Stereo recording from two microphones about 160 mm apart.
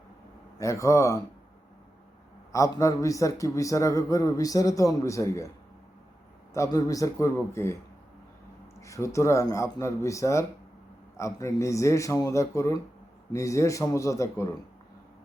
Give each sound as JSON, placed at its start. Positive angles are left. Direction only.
{"t": 0.6, "sound": "a man's voice", "side_deg": 20}
{"t": 2.5, "sound": "a man's voice", "side_deg": 20}
{"t": 6.5, "sound": "a man's voice", "side_deg": 20}
{"t": 8.8, "sound": "a man's voice", "side_deg": 20}